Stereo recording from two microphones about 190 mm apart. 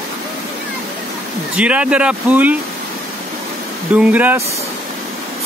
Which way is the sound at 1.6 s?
5° right (ahead or behind).